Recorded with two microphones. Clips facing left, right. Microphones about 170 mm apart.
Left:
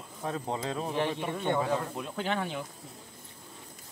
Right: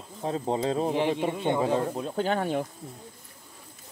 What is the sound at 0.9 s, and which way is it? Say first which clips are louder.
Speech: right 5 dB; 20° right (ahead or behind).